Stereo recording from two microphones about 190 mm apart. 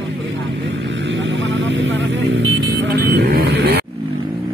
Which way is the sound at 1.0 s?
75° right (ahead or behind).